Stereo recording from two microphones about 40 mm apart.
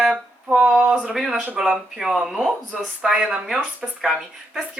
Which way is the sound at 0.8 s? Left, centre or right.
Right.